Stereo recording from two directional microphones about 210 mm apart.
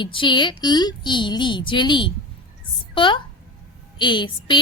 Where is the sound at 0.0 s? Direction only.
20° left (ahead or behind).